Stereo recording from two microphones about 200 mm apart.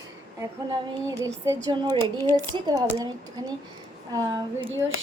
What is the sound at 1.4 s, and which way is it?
Speech, 20° right (ahead or behind).